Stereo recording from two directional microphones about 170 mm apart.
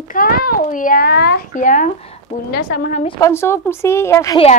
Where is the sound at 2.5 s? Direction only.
65° left (ahead or behind).